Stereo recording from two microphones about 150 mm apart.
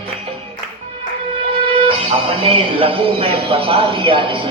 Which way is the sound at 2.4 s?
40° right (ahead or behind).